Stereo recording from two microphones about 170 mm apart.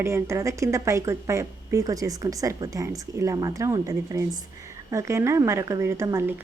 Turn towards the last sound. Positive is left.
turn(degrees=-15)  # may be behind; listen again after turning